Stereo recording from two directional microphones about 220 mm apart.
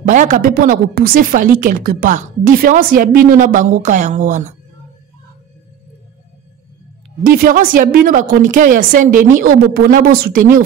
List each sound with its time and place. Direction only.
0.0 s a woman's voice: 35° right (ahead or behind)
7.2 s a woman's voice: 40° right (ahead or behind)